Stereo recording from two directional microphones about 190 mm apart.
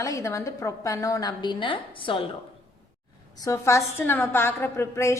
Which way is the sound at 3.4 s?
15° left (ahead or behind).